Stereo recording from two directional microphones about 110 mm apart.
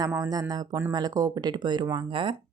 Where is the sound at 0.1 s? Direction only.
35° right (ahead or behind).